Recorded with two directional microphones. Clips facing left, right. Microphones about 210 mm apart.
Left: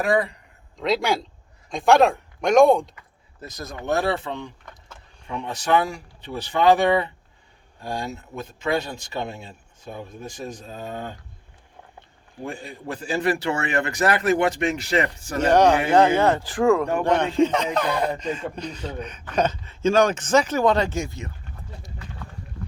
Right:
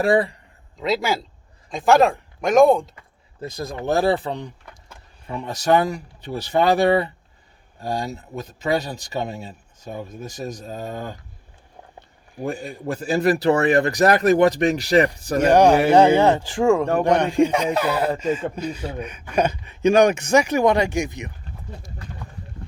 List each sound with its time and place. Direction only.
0.0 s speech: 30° right (ahead or behind)
0.8 s speech: centre (ahead or behind)
3.4 s speech: 30° right (ahead or behind)
5.5 s speech: 40° right (ahead or behind)
11.9 s a sound: 40° right (ahead or behind)
12.6 s speech: 40° right (ahead or behind)
15.4 s speech: 10° right (ahead or behind)